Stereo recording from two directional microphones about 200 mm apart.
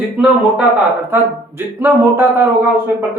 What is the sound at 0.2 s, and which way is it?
Speech, 5° right (ahead or behind).